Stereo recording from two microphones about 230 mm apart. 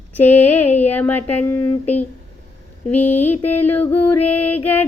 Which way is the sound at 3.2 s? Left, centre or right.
Left.